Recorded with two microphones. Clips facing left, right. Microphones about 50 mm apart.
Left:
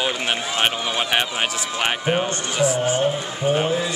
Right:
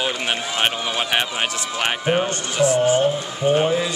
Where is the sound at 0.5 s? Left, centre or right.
Centre.